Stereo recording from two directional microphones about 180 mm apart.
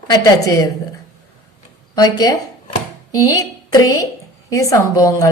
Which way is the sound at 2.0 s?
20° left (ahead or behind).